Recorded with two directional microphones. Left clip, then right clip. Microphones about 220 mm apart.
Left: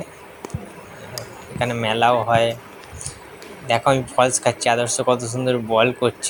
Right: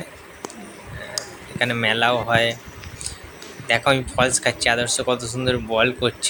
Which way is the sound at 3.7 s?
5° right (ahead or behind).